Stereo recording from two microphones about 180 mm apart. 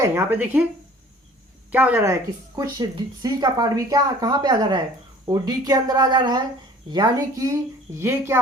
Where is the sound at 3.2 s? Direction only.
20° right (ahead or behind).